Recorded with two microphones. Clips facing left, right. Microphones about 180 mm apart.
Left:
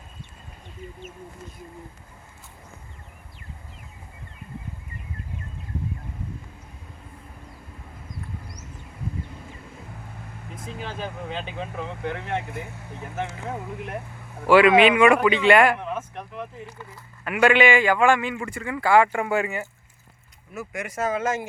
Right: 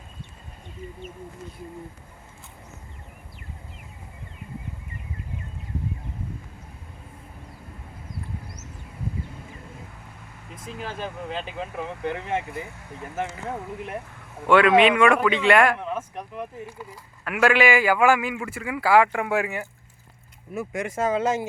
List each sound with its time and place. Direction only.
10.8 s a man's voice: centre (ahead or behind)
20.5 s speech: 25° right (ahead or behind)